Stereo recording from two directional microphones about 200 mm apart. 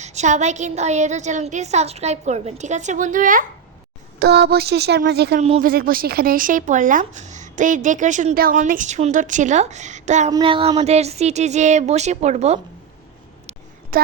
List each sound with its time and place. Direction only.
0.0 s a woman's voice: 35° right (ahead or behind)
4.2 s a woman's voice: 55° right (ahead or behind)
5.4 s a woman's voice: 35° right (ahead or behind)
5.7 s a woman's voice: 45° right (ahead or behind)
10.3 s a woman's voice: 25° right (ahead or behind)
13.9 s a sound: 50° right (ahead or behind)